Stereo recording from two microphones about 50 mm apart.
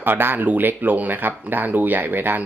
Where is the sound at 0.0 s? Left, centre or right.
Right.